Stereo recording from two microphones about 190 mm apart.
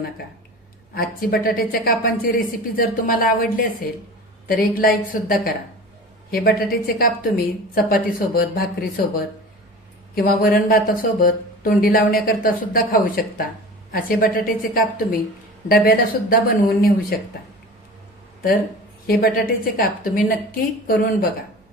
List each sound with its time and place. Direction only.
0.9 s a woman's voice: 50° left (ahead or behind)
19.0 s a woman's voice: 50° left (ahead or behind)